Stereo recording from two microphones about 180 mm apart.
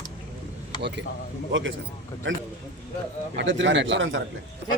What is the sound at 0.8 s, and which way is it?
Speech, 70° right (ahead or behind).